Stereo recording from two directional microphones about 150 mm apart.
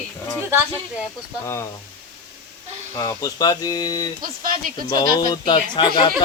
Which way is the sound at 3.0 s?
25° left (ahead or behind).